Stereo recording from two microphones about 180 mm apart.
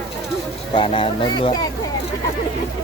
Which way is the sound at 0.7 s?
30° left (ahead or behind).